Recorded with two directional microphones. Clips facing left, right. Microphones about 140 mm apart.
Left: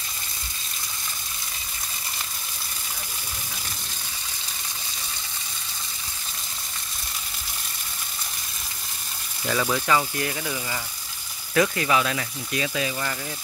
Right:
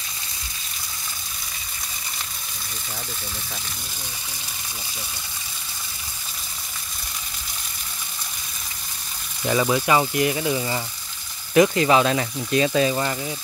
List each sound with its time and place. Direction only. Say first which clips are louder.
9.4 s speech: right 4 dB; 15° right (ahead or behind); by 13.1 s 35° right (ahead or behind)